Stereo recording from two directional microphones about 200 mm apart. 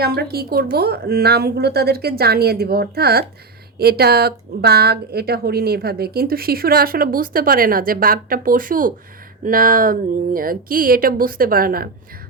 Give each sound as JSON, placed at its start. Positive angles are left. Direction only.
{"t": 0.0, "sound": "a woman's voice", "side_deg": -50}